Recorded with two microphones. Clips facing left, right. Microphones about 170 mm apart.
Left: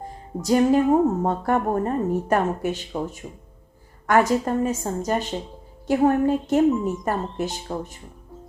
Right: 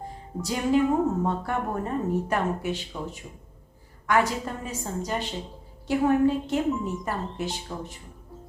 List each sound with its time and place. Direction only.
0.4 s a woman's voice: 45° left (ahead or behind)